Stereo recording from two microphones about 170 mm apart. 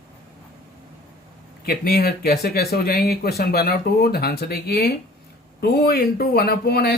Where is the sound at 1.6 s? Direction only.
65° left (ahead or behind).